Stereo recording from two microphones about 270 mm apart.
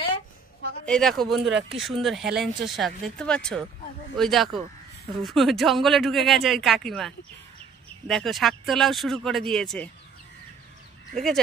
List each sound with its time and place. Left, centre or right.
0.8 s speech: centre
1.4 s speech: right
1.8 s speech: centre
11.1 s speech: centre